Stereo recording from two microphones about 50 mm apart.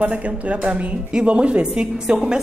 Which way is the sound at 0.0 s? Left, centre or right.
Right.